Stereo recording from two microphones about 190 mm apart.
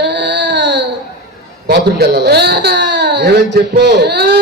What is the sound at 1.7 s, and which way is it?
Speech, 60° right (ahead or behind).